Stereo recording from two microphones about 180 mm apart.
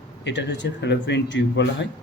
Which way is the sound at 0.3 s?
75° left (ahead or behind).